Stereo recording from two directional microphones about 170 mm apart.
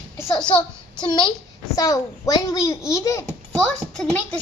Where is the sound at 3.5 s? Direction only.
5° left (ahead or behind).